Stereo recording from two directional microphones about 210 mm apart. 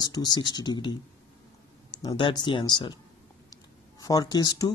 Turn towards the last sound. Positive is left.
turn(degrees=20)  # may be behind; listen again after turning